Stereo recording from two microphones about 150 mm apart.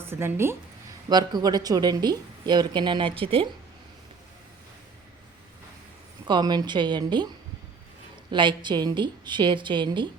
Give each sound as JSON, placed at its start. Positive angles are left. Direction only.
{"t": 0.0, "sound": "speech", "side_deg": -15}
{"t": 1.1, "sound": "a woman's voice", "side_deg": -25}
{"t": 6.2, "sound": "a woman's voice", "side_deg": -30}
{"t": 8.3, "sound": "a woman's voice", "side_deg": -30}